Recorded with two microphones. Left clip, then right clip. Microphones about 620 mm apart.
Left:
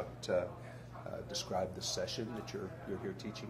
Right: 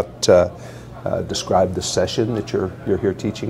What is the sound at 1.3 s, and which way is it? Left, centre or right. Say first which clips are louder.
Speech: right 19 dB; right.